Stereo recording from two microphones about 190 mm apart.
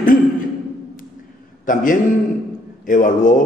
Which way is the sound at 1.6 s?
45° left (ahead or behind).